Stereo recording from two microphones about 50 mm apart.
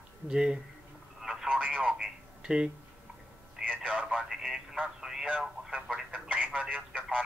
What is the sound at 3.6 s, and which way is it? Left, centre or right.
Speech, right.